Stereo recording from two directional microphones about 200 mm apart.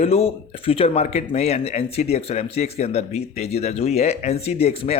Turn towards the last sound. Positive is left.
turn(degrees=30)  # may be behind; listen again after turning